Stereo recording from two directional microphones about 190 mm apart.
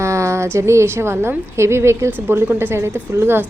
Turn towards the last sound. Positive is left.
turn(degrees=-10)  # may be behind; listen again after turning